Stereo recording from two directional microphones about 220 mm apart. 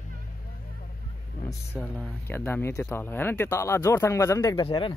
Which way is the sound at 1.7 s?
10° left (ahead or behind).